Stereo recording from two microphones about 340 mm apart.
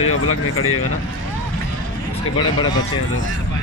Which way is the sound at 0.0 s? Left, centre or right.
Left.